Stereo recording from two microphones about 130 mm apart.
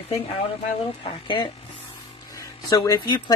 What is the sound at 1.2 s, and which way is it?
Speech, 40° left (ahead or behind).